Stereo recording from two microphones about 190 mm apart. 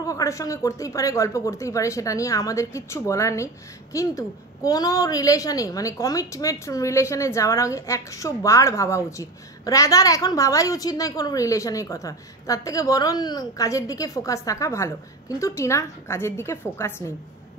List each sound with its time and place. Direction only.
0.0 s a woman's voice: 15° left (ahead or behind)